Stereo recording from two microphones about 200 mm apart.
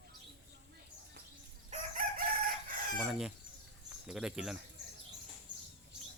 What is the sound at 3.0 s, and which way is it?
Speech, 5° right (ahead or behind).